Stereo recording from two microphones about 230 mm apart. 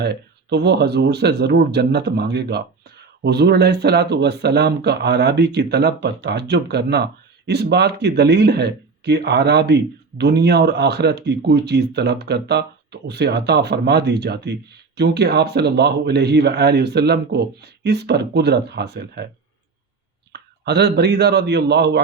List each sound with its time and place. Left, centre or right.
0.0 s speech: right
20.3 s a man's voice: right